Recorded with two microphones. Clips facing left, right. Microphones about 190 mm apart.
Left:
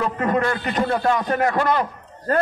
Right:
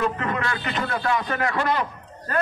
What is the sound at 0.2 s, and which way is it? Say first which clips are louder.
A man's voice: left 6 dB; 45° left (ahead or behind).